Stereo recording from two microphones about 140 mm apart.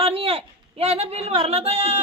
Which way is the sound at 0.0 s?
45° right (ahead or behind).